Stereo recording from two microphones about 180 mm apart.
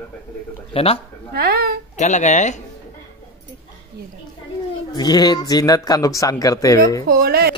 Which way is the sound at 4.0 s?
60° right (ahead or behind).